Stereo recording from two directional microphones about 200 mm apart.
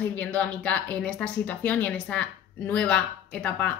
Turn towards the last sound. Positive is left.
turn(degrees=5)  # may be behind; listen again after turning